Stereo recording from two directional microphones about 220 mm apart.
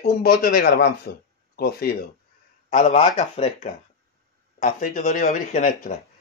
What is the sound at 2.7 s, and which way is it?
Speech, 30° left (ahead or behind).